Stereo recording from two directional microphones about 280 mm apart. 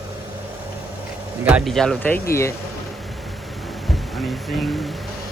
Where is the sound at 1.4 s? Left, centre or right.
Centre.